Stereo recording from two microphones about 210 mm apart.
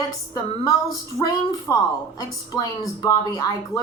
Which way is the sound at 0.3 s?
15° left (ahead or behind).